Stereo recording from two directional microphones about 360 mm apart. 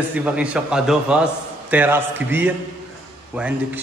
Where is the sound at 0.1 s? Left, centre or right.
Centre.